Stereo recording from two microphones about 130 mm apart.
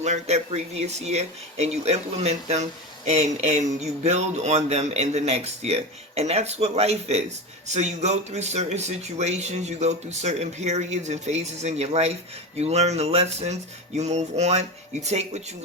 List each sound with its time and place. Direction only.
0.0 s speech: 60° right (ahead or behind)